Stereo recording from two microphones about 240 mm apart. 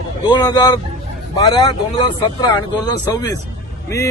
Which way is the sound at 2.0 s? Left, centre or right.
Centre.